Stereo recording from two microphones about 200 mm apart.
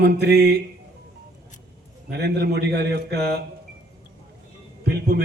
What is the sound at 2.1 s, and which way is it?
A man's voice, 55° right (ahead or behind).